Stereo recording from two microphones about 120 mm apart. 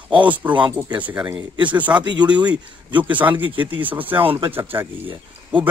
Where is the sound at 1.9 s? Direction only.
40° right (ahead or behind).